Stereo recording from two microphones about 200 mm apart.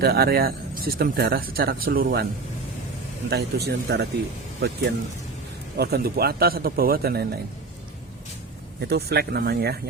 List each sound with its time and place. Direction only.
0.0 s speech: 50° right (ahead or behind)
3.2 s speech: 55° right (ahead or behind)
5.7 s speech: 50° right (ahead or behind)
8.8 s speech: 55° right (ahead or behind)